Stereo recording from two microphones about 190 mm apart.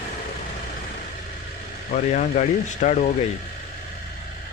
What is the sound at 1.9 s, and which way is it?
Speech, 40° left (ahead or behind).